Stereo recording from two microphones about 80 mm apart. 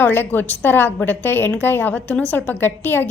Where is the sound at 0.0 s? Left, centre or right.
Left.